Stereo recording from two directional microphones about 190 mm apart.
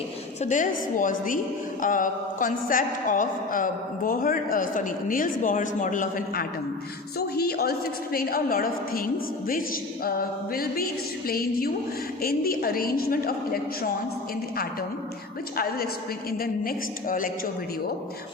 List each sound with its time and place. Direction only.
0.4 s a woman's voice: 40° left (ahead or behind)
7.2 s a woman's voice: 55° left (ahead or behind)
16.4 s a woman's voice: 50° left (ahead or behind)